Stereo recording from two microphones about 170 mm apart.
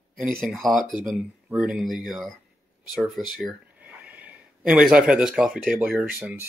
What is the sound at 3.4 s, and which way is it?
Speech, 5° right (ahead or behind).